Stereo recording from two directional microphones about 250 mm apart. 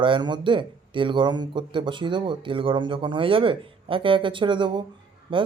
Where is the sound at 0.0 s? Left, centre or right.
Centre.